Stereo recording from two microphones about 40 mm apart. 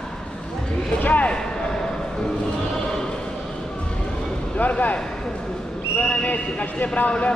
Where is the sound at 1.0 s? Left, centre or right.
Left.